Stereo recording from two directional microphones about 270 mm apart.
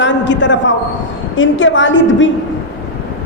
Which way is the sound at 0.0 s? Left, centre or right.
Left.